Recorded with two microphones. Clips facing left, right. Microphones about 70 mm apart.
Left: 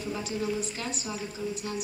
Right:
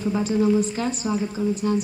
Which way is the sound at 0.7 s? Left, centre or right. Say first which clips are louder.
Right 10 dB; right.